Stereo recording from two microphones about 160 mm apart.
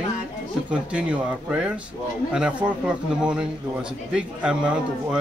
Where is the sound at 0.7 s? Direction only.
10° right (ahead or behind).